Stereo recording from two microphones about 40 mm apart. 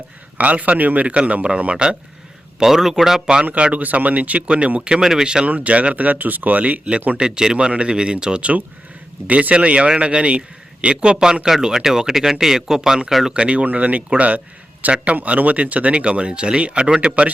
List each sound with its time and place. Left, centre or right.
0.3 s speech: right
1.1 s speech: right
2.6 s speech: centre
3.4 s speech: right
4.9 s speech: centre
5.5 s speech: right
7.2 s speech: centre
13.3 s speech: right
13.7 s speech: right